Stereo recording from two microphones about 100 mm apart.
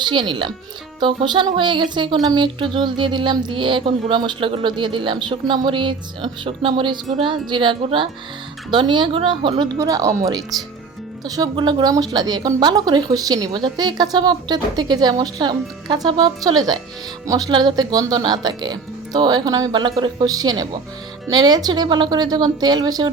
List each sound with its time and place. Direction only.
0.0 s speech: 50° right (ahead or behind)
9.7 s speech: 35° right (ahead or behind)
11.5 s speech: 45° right (ahead or behind)